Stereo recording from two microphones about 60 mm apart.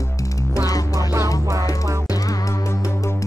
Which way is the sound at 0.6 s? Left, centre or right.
Left.